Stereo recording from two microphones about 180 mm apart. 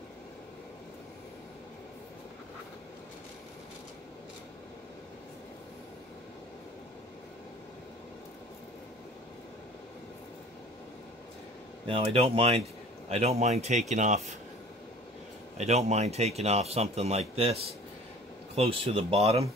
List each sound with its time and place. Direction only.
11.8 s speech: 30° right (ahead or behind)
15.5 s speech: 40° right (ahead or behind)
18.6 s speech: 30° right (ahead or behind)